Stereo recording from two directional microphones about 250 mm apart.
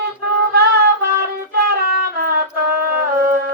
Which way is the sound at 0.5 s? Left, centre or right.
Right.